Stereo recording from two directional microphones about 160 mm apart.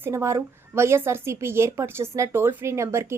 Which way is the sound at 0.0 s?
15° right (ahead or behind).